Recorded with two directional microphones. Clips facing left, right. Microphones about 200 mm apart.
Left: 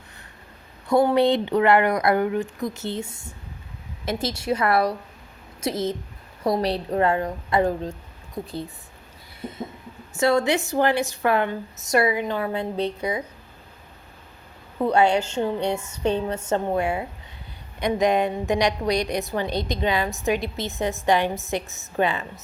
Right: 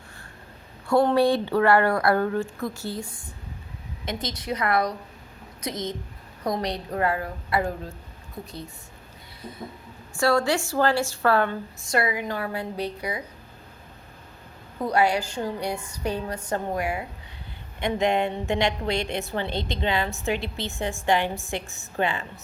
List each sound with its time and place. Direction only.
1.1 s a woman's voice: 20° left (ahead or behind)
6.4 s a woman's voice: 30° left (ahead or behind)
9.4 s a sound: 25° left (ahead or behind)
10.2 s a woman's voice: 20° left (ahead or behind)
14.8 s a woman's voice: 25° left (ahead or behind)